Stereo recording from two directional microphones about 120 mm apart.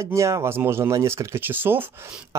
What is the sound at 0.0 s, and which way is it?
Speech, 25° right (ahead or behind).